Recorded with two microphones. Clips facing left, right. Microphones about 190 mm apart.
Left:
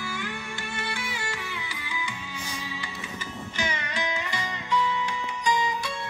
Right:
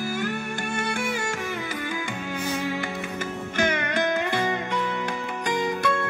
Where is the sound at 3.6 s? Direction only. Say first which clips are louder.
Right 8 dB; 55° right (ahead or behind).